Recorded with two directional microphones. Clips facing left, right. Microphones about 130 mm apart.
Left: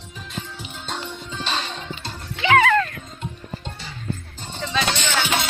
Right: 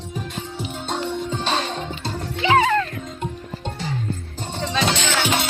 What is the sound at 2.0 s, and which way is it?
Music, 30° right (ahead or behind).